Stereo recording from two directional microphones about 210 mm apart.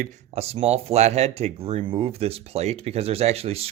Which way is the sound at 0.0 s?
30° right (ahead or behind).